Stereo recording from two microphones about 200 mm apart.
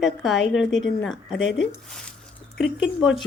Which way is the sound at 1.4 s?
65° left (ahead or behind).